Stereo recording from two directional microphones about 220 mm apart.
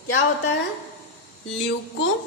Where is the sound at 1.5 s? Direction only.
60° left (ahead or behind).